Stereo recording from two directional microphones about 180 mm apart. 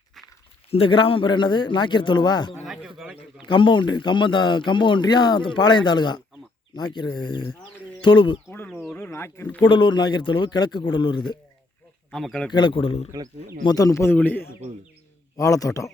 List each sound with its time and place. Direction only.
0.7 s speech: 30° left (ahead or behind)
2.6 s bird: centre (ahead or behind)
3.4 s speech: 25° left (ahead or behind)
8.4 s a sound: 10° left (ahead or behind)
9.6 s speech: 25° left (ahead or behind)
12.1 s speech: 5° left (ahead or behind)
12.5 s speech: 25° left (ahead or behind)
13.1 s speech: 15° right (ahead or behind)
13.6 s speech: 20° left (ahead or behind)